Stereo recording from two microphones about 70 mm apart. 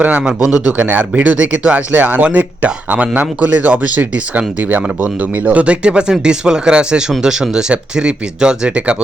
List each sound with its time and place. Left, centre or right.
0.0 s speech: centre
0.8 s speech: right